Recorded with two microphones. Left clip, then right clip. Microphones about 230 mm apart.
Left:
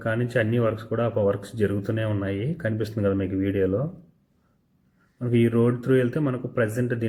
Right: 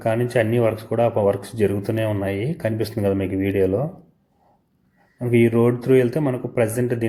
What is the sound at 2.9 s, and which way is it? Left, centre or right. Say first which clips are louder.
Speech: right 2 dB; right.